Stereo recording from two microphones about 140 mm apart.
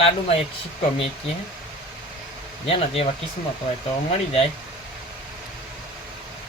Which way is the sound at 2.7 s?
45° left (ahead or behind).